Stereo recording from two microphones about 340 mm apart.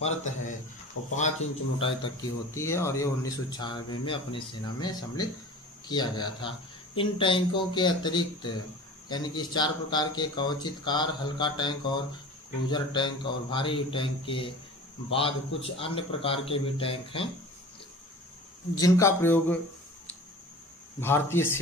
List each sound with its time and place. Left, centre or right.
0.0 s speech: centre
1.0 s speech: left
1.8 s a man's voice: centre
18.8 s a man's voice: centre
21.0 s a man's voice: centre